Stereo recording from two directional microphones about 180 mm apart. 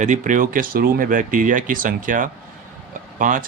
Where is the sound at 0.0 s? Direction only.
45° right (ahead or behind).